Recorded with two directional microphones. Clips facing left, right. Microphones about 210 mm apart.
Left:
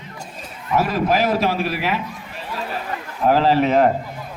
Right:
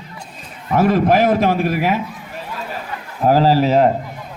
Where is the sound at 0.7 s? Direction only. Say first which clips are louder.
Right 5 dB; 50° right (ahead or behind).